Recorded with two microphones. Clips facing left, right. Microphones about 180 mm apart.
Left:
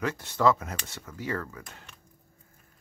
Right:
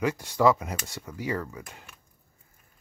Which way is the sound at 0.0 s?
10° right (ahead or behind).